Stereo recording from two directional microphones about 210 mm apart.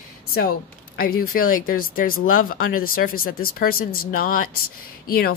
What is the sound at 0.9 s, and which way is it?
Speech, 45° left (ahead or behind).